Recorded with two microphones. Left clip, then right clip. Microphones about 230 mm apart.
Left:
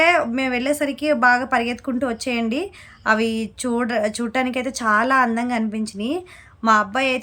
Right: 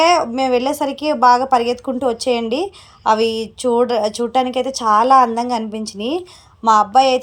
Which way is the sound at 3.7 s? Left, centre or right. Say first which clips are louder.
Right 6 dB; left.